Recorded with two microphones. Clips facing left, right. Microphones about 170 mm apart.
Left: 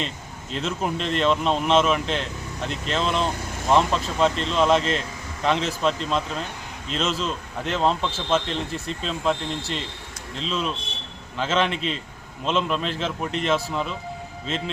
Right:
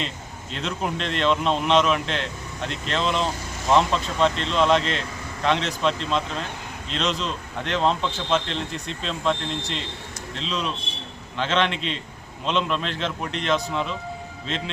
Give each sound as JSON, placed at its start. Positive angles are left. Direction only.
{"t": 0.5, "sound": "a man's voice", "side_deg": 0}